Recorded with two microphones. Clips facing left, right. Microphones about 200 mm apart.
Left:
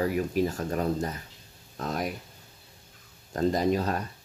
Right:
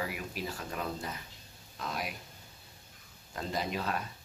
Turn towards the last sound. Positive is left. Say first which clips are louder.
# left 8 dB
turn(degrees=40)  # may be behind; listen again after turning